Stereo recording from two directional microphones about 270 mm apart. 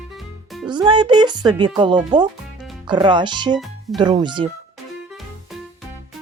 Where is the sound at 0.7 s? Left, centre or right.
Centre.